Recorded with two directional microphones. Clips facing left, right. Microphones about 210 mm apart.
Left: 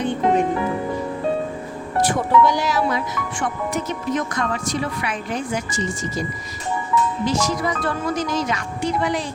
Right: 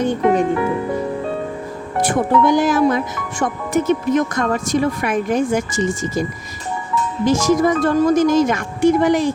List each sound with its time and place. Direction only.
0.0 s speech: 40° right (ahead or behind)
2.0 s speech: 50° right (ahead or behind)
7.3 s speech: 45° right (ahead or behind)